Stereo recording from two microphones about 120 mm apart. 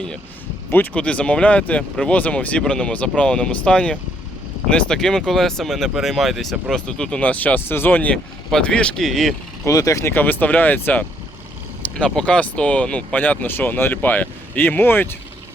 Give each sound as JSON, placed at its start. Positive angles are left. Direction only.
{"t": 0.7, "sound": "speech", "side_deg": 10}
{"t": 9.6, "sound": "speech", "side_deg": 25}